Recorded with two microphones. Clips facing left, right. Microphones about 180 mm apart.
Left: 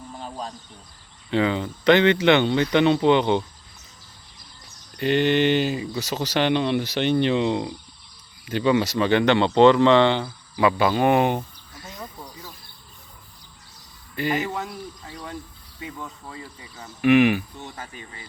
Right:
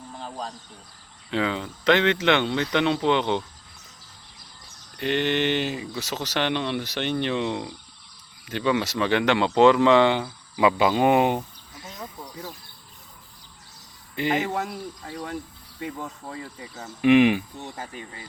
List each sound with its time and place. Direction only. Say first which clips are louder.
0.2 s a sound: even; centre (ahead or behind)
1.3 s speech: left 4 dB; centre (ahead or behind)
4.9 s speech: left 4 dB; 5° left (ahead or behind); by 11.9 s 15° right (ahead or behind)
14.2 s speech: even; 20° right (ahead or behind)
15.0 s speech: right 4 dB; 45° right (ahead or behind)
16.3 s speech: right 3 dB; 45° right (ahead or behind)
17.0 s speech: even; 25° right (ahead or behind)